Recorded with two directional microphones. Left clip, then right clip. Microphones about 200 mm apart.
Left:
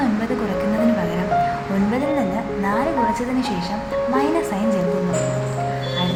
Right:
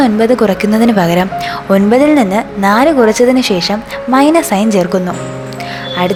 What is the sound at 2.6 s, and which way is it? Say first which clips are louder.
A woman's voice: right 12 dB; 50° right (ahead or behind).